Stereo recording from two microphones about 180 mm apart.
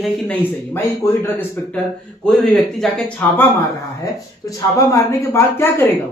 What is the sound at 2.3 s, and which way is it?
Speech, 5° left (ahead or behind).